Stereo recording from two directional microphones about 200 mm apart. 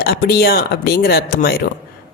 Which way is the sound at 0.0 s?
50° left (ahead or behind).